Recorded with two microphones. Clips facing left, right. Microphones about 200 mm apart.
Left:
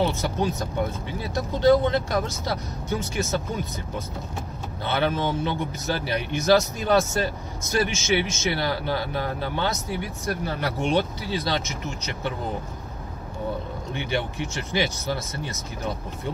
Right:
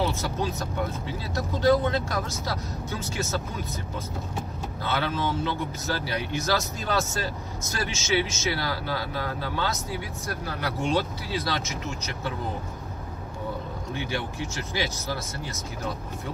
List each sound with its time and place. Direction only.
0.0 s speech: 15° left (ahead or behind)
4.8 s speech: 20° left (ahead or behind)
14.5 s speech: 15° left (ahead or behind)